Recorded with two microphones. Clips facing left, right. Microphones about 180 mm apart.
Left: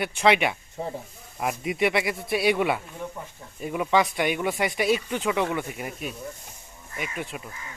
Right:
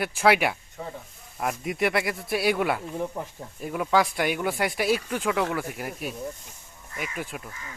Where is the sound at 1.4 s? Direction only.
5° left (ahead or behind).